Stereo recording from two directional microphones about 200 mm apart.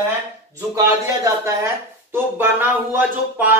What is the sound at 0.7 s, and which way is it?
Speech, 15° right (ahead or behind).